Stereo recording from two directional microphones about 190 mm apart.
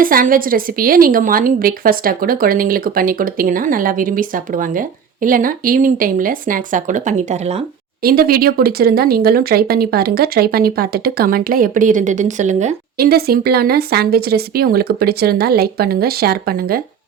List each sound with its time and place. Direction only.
0.0 s a woman's voice: 50° right (ahead or behind)
8.0 s a woman's voice: 50° right (ahead or behind)
13.0 s a woman's voice: 55° right (ahead or behind)